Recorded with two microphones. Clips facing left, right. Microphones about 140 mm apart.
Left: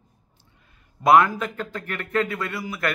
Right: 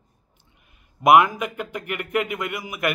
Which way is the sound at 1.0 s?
15° right (ahead or behind).